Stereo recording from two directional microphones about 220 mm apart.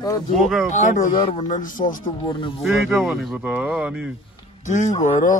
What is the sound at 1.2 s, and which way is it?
Speech, 25° left (ahead or behind).